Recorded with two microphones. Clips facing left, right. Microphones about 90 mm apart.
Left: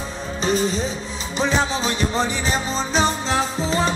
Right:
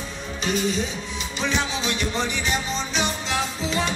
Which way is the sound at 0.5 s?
35° left (ahead or behind).